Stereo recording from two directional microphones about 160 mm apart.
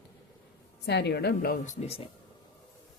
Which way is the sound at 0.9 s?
90° left.